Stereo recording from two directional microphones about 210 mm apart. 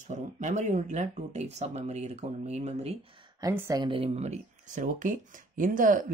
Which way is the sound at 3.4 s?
15° right (ahead or behind).